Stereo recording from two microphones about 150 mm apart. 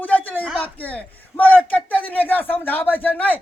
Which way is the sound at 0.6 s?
10° left (ahead or behind).